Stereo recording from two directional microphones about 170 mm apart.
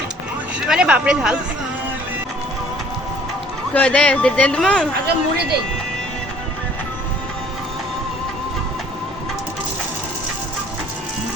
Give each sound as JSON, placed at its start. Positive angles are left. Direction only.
{"t": 0.6, "sound": "speech", "side_deg": -5}
{"t": 3.8, "sound": "a man's voice", "side_deg": 5}
{"t": 5.0, "sound": "speech", "side_deg": -70}